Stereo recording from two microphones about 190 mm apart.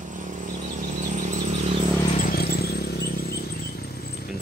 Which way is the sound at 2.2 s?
55° left (ahead or behind).